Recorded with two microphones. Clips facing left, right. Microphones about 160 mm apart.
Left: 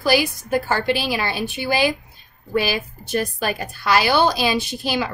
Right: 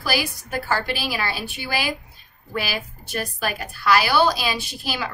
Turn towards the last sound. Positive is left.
turn(degrees=20)  # may be behind; listen again after turning